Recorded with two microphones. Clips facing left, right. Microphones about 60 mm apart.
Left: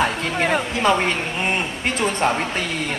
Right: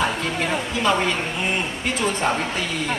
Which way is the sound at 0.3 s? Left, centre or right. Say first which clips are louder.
Left 3 dB; left.